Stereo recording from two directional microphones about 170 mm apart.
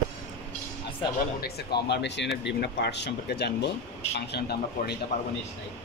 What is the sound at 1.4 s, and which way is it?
Speech, 75° left (ahead or behind).